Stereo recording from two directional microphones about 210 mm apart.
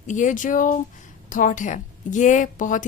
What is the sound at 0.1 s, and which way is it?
A woman's voice, 35° left (ahead or behind).